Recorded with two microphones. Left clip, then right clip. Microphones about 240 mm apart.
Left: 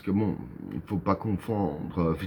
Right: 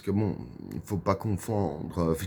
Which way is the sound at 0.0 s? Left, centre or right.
Right.